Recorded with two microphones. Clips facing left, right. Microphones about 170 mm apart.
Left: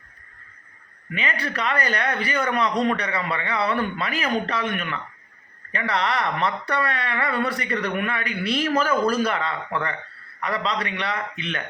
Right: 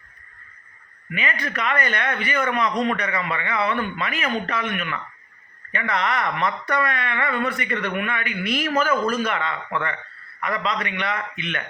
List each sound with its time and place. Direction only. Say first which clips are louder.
1.1 s a woman's voice: even; 30° left (ahead or behind)